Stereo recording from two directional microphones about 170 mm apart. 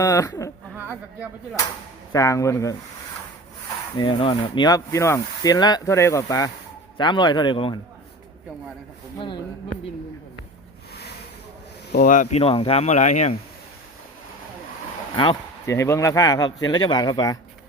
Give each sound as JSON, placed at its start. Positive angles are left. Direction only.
{"t": 0.0, "sound": "speech", "side_deg": 20}
{"t": 0.8, "sound": "speech", "side_deg": -10}
{"t": 2.1, "sound": "speech", "side_deg": 20}
{"t": 3.9, "sound": "speech", "side_deg": 25}
{"t": 9.1, "sound": "speech", "side_deg": 25}
{"t": 12.0, "sound": "speech", "side_deg": 50}
{"t": 15.1, "sound": "speech", "side_deg": 25}